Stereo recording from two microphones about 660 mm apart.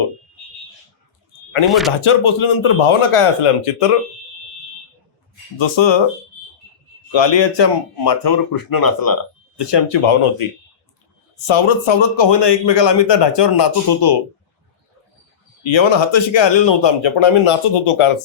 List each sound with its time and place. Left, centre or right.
1.6 s speech: centre
2.0 s speech: left
5.5 s a man's voice: left
7.1 s a man's voice: left
11.4 s a man's voice: left
15.6 s a man's voice: left